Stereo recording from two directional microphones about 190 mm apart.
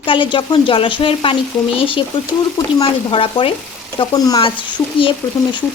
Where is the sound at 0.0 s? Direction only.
25° left (ahead or behind).